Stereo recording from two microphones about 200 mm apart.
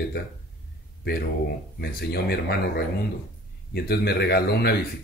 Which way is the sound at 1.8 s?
50° left (ahead or behind).